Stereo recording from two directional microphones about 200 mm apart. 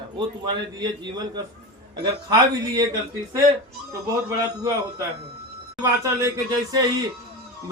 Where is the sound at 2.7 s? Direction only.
20° right (ahead or behind).